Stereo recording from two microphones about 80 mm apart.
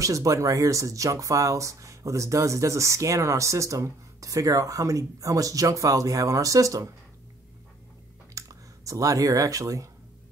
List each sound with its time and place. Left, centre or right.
0.0 s speech: right
8.4 s speech: right